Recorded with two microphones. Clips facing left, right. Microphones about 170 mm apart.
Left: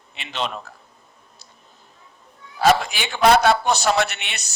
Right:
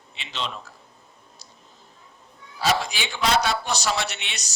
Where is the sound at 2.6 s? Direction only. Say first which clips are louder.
Left 6 dB; 55° left (ahead or behind).